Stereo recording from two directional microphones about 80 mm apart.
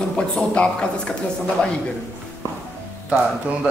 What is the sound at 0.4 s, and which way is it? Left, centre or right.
Speech, centre.